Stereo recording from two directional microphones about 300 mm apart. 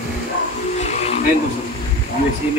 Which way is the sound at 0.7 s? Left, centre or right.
Left.